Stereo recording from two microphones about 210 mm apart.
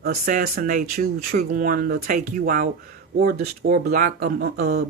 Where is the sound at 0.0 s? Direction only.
45° right (ahead or behind).